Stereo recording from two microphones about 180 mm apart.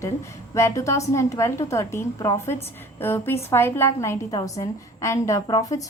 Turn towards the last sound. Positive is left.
turn(degrees=20)  # may be behind; listen again after turning